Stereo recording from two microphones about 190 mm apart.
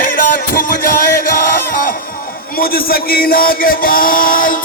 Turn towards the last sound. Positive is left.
turn(degrees=45)  # may be behind; listen again after turning